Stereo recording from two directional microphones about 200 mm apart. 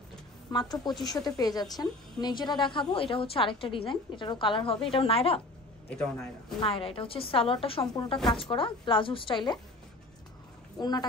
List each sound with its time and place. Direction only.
0.5 s a woman's voice: 20° left (ahead or behind)
5.9 s a man's voice: 5° left (ahead or behind)
6.6 s a woman's voice: 25° left (ahead or behind)
10.8 s a woman's voice: 20° left (ahead or behind)